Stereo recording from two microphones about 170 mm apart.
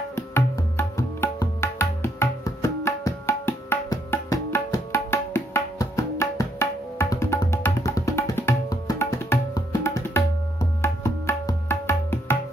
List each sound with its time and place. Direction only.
0.1 s music: 15° left (ahead or behind)